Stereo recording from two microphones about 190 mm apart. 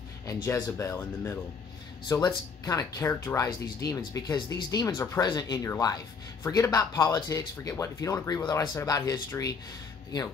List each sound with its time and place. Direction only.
0.3 s speech: 15° left (ahead or behind)